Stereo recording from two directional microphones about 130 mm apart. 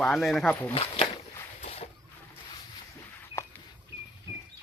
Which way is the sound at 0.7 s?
45° left (ahead or behind).